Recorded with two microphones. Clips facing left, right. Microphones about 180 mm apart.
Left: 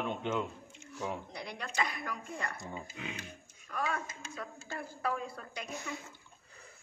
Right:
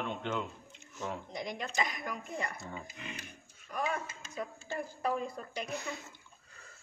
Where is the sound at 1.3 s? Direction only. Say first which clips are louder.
Right 3 dB; 15° right (ahead or behind).